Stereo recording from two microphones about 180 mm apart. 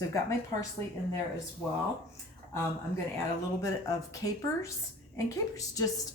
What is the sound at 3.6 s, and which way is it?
Speech, 20° left (ahead or behind).